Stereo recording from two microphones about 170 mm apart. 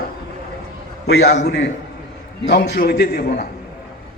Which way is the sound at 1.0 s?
70° left (ahead or behind).